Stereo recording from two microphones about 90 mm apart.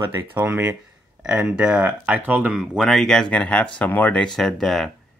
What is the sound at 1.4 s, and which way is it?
Speech, 15° right (ahead or behind).